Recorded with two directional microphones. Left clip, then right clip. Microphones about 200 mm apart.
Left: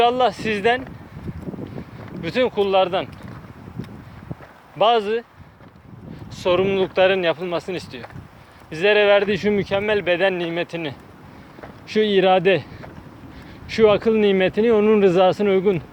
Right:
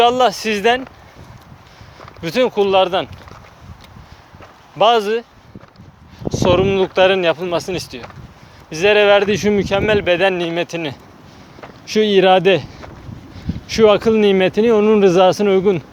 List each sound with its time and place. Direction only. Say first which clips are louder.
0.0 s speech: right 4 dB; 30° right (ahead or behind)
2.2 s speech: right 4 dB; 30° right (ahead or behind)
4.8 s speech: right 4 dB; 30° right (ahead or behind)
6.3 s speech: right 4 dB; 25° right (ahead or behind)